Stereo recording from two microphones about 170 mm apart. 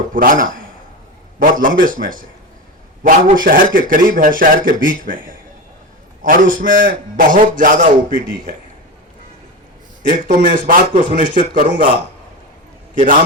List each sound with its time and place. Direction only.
0.1 s a man's voice: 55° right (ahead or behind)
6.2 s a man's voice: 50° right (ahead or behind)
10.1 s a man's voice: 50° right (ahead or behind)
12.9 s a man's voice: 50° right (ahead or behind)